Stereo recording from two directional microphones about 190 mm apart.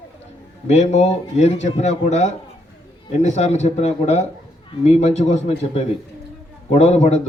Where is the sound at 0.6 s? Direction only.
35° left (ahead or behind).